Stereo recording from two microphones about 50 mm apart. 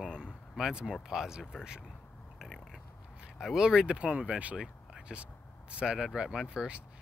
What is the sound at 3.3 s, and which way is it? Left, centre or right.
Speech, centre.